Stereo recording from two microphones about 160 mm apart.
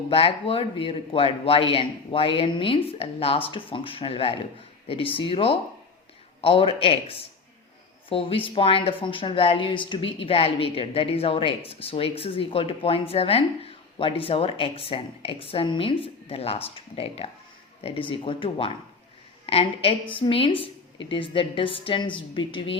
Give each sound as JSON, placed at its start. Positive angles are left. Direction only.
{"t": 0.1, "sound": "speech", "side_deg": 35}